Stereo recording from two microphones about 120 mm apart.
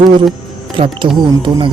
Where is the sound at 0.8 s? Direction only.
40° right (ahead or behind).